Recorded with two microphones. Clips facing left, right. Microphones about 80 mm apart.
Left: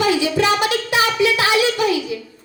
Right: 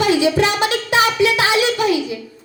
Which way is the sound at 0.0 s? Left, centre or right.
Right.